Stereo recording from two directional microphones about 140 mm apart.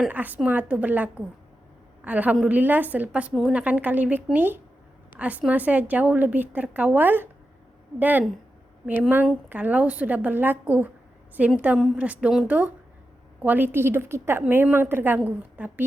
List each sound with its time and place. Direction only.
0.0 s a woman's voice: 10° right (ahead or behind)